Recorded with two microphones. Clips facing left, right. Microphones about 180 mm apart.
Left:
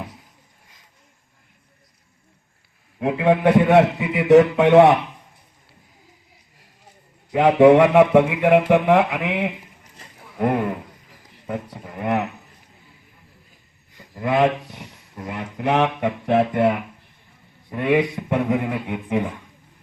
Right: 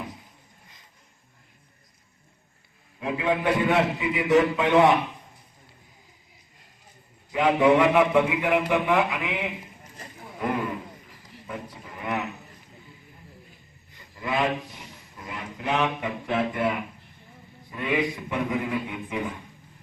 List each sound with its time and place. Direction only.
3.0 s speech: 60° left (ahead or behind)
7.3 s speech: 60° left (ahead or behind)
14.1 s speech: 60° left (ahead or behind)